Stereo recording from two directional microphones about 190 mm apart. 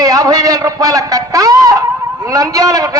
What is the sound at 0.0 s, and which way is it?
A man's voice, 20° right (ahead or behind).